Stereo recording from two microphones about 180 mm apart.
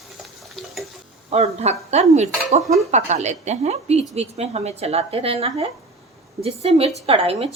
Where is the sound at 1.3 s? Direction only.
35° right (ahead or behind).